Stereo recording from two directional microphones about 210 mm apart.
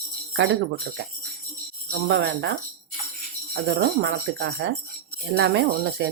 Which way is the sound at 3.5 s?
55° right (ahead or behind).